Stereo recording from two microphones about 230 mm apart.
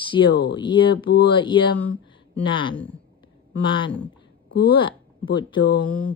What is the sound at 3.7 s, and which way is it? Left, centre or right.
Speech, centre.